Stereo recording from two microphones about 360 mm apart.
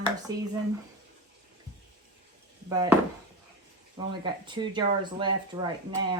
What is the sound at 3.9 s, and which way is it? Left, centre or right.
Speech, centre.